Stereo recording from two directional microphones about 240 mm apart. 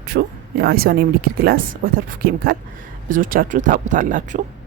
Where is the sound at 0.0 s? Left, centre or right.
Right.